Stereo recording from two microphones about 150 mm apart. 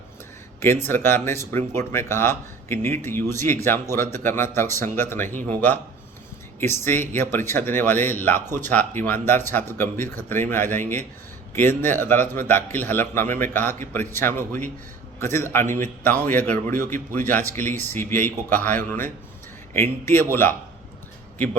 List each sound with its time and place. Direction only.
0.6 s speech: 15° left (ahead or behind)